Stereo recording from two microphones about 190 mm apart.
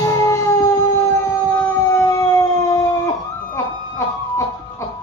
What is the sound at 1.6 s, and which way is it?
Howl, 15° left (ahead or behind).